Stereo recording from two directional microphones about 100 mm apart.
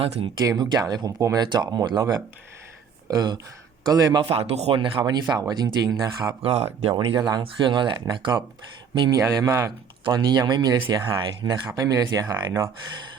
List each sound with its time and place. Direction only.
0.3 s speech: 40° right (ahead or behind)
4.3 s speech: 90° right
4.8 s speech: 50° right (ahead or behind)
6.4 s speech: 80° right
6.9 s speech: 45° right (ahead or behind)
7.4 s speech: 55° right (ahead or behind)
9.0 s speech: 40° right (ahead or behind)
10.1 s speech: 45° right (ahead or behind)
11.7 s speech: 35° right (ahead or behind)